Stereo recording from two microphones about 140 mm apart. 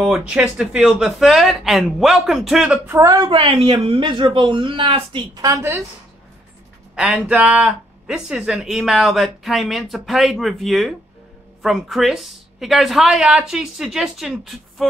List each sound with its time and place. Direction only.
0.0 s speech: 5° right (ahead or behind)
2.9 s a woman's voice: 20° right (ahead or behind)
3.3 s speech: 40° right (ahead or behind)
5.4 s a woman's voice: 20° right (ahead or behind)
7.0 s speech: 10° right (ahead or behind)